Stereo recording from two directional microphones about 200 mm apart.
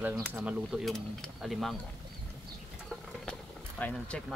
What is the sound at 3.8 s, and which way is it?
Speech, 5° left (ahead or behind).